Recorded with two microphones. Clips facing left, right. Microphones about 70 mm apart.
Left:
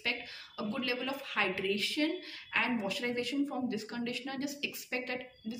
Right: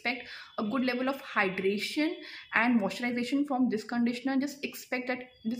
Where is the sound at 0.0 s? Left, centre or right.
Right.